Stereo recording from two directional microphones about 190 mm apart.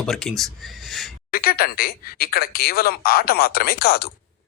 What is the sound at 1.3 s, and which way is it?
Speech, 50° left (ahead or behind).